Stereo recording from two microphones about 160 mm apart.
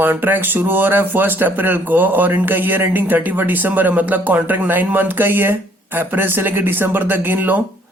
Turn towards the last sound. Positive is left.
turn(degrees=-10)  # may be behind; listen again after turning